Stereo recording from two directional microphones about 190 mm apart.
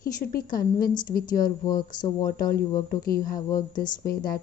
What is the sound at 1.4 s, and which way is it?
Speech, 20° left (ahead or behind).